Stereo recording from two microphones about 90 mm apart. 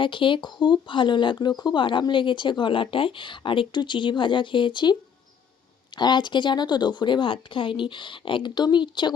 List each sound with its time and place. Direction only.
0.0 s speech: 65° left (ahead or behind)
6.0 s speech: 60° left (ahead or behind)